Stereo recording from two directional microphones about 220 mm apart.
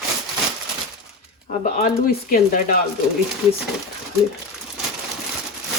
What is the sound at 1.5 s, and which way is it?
Speech, 35° left (ahead or behind).